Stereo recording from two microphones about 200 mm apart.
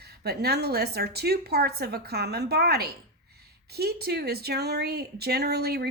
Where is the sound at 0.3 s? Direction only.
55° right (ahead or behind).